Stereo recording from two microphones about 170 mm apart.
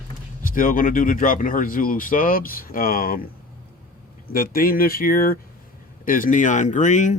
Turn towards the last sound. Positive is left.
turn(degrees=45)  # may be behind; listen again after turning